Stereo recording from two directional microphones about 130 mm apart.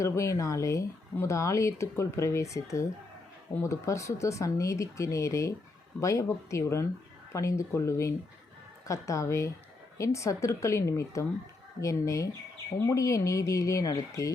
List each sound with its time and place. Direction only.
0.0 s speech: 25° left (ahead or behind)